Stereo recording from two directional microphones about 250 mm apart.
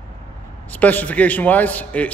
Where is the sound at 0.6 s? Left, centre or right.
Centre.